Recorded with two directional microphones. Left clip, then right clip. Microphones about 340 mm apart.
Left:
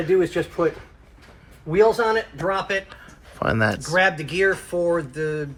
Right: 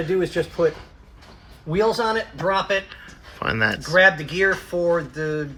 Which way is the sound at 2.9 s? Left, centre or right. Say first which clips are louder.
Right 3 dB; centre.